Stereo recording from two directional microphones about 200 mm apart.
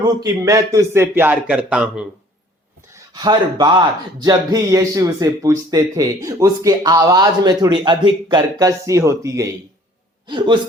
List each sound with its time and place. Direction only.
0.0 s speech: 20° right (ahead or behind); by 2.0 s 5° right (ahead or behind)
2.9 s a man's voice: 20° right (ahead or behind)